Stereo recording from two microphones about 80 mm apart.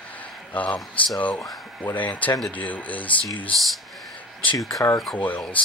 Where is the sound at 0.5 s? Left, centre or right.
Centre.